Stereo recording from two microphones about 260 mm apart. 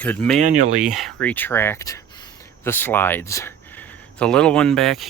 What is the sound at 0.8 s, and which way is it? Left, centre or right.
Speech, centre.